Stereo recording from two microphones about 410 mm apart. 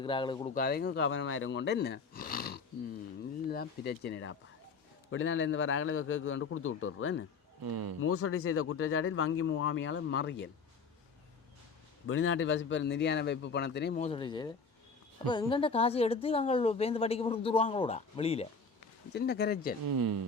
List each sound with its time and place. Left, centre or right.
0.0 s speech: centre; by 7.3 s left
7.6 s speech: right
8.0 s speech: left
12.0 s speech: left
19.8 s speech: right